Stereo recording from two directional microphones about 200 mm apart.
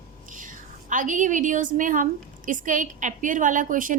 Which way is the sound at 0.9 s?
40° right (ahead or behind).